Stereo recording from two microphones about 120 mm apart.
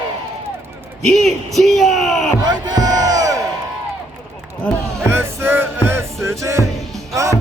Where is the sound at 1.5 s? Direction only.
Centre (ahead or behind).